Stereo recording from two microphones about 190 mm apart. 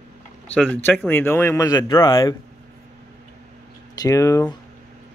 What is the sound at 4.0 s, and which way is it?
Speech, 15° left (ahead or behind).